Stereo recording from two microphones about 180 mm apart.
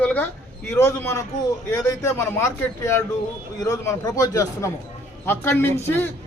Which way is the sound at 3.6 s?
20° left (ahead or behind).